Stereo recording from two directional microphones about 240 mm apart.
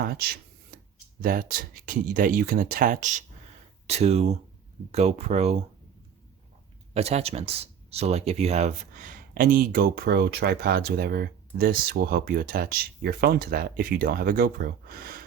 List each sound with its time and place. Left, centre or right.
1.2 s speech: right
6.9 s speech: right